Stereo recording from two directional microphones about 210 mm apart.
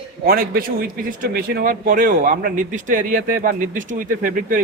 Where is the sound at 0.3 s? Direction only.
45° right (ahead or behind).